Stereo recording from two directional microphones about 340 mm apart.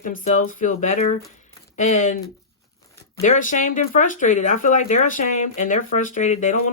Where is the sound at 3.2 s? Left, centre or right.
Left.